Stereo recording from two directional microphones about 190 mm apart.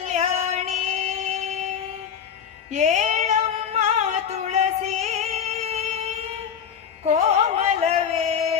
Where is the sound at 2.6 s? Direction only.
40° right (ahead or behind).